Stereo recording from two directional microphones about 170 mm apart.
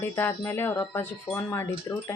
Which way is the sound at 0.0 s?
15° left (ahead or behind).